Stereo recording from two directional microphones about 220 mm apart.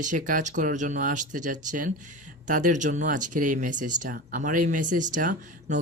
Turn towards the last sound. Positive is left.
turn(degrees=-35)  # may be behind; listen again after turning